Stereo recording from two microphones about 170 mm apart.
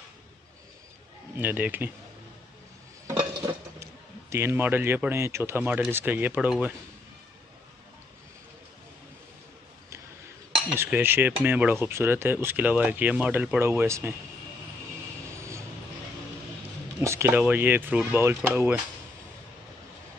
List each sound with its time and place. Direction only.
1.4 s speech: 10° right (ahead or behind)
3.4 s a sound: 20° right (ahead or behind)
3.8 s speech: 15° right (ahead or behind)
10.7 s speech: 15° right (ahead or behind)
17.0 s speech: 15° right (ahead or behind)